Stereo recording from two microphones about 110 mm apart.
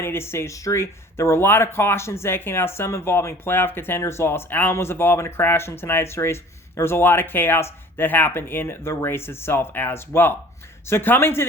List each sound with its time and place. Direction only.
0.0 s speech: 20° left (ahead or behind)